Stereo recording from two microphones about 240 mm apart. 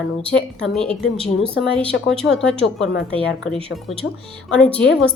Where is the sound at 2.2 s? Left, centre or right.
Centre.